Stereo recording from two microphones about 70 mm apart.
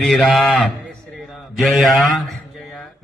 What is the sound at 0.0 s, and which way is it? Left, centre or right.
Speech, centre.